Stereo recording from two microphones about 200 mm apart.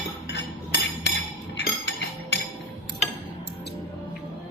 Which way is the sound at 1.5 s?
55° left (ahead or behind).